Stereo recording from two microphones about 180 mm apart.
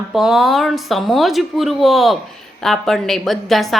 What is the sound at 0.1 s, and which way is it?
A woman's voice, centre (ahead or behind).